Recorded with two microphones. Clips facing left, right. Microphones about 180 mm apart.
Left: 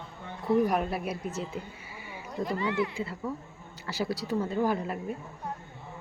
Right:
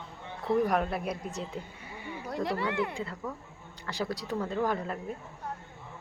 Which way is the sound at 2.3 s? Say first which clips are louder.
Left 1 dB; 75° right (ahead or behind).